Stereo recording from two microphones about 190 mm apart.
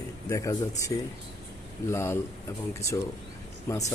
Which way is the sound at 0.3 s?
15° left (ahead or behind).